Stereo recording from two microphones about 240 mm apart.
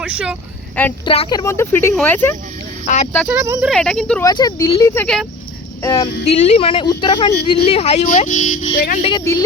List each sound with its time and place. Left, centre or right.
0.0 s speech: centre
1.0 s speech: left
2.8 s speech: left
3.2 s speech: centre
3.7 s speech: centre
4.3 s speech: centre
5.0 s speech: centre
5.8 s speech: centre; by 9.0 s left
9.0 s speech: centre